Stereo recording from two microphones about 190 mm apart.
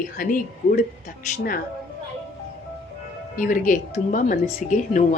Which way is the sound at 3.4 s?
45° left (ahead or behind).